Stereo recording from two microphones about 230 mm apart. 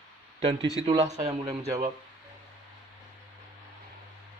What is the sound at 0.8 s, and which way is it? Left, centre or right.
Speech, right.